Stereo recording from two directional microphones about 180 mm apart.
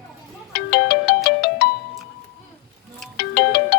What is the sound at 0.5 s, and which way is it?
Ringtone, 60° left (ahead or behind).